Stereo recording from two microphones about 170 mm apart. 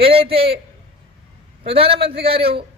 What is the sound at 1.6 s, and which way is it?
Speech, 35° right (ahead or behind).